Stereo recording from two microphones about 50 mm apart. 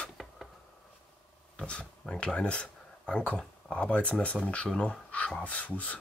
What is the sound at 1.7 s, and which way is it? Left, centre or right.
Speech, left.